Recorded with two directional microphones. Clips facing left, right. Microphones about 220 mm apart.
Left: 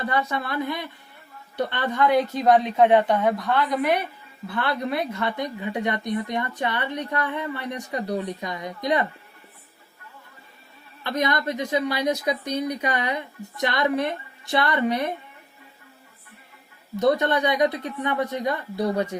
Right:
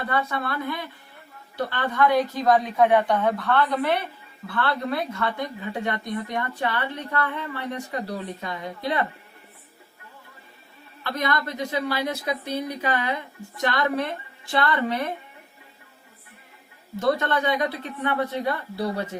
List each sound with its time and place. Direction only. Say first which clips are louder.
0.1 s a woman's voice: right 1 dB; 15° left (ahead or behind)
11.0 s a woman's voice: left 2 dB; 20° left (ahead or behind)
17.0 s a woman's voice: left 3 dB; 20° left (ahead or behind)